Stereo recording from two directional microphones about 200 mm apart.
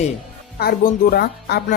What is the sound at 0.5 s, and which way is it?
Speech, 50° left (ahead or behind).